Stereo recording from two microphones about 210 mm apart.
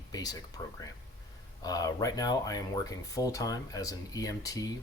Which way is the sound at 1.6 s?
15° left (ahead or behind).